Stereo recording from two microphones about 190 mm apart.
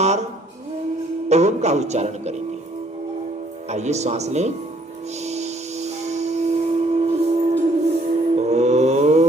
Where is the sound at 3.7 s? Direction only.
35° right (ahead or behind).